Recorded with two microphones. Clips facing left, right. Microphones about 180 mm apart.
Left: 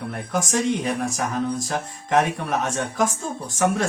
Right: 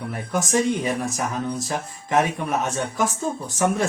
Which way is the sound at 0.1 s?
Centre (ahead or behind).